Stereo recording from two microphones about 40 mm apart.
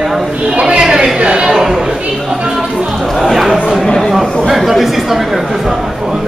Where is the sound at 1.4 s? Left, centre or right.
Centre.